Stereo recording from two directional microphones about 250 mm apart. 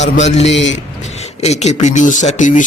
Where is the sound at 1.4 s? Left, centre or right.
Left.